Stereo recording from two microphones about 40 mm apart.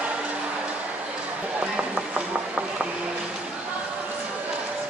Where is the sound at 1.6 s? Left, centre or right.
Right.